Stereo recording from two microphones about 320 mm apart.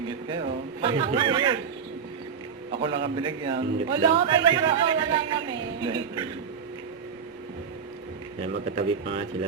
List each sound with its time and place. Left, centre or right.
0.8 s speech: centre
2.8 s speech: centre
8.7 s speech: centre